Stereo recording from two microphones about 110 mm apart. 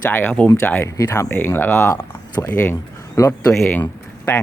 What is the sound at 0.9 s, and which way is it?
Speech, 30° left (ahead or behind).